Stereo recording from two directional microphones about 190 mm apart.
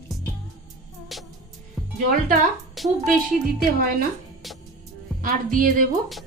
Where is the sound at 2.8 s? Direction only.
Centre (ahead or behind).